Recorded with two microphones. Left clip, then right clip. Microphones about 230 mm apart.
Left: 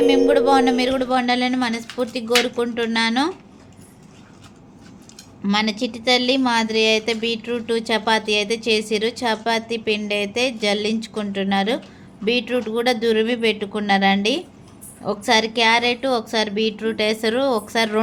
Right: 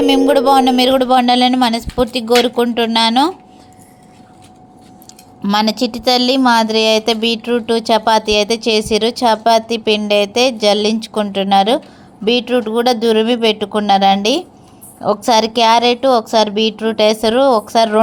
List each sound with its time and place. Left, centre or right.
0.0 s a woman's voice: right
5.4 s a woman's voice: right